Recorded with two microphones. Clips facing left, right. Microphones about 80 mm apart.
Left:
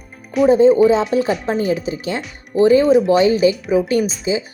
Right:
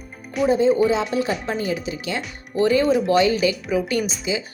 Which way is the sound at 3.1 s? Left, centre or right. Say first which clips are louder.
Left 5 dB; left.